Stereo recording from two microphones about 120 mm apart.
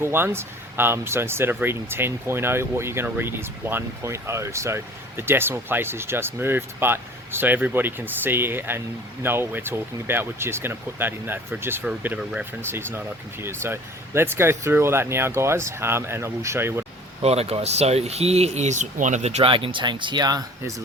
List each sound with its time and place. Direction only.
0.0 s speech: 20° right (ahead or behind)
17.2 s speech: 60° right (ahead or behind)
19.5 s speech: 45° right (ahead or behind); by 20.8 s 30° right (ahead or behind)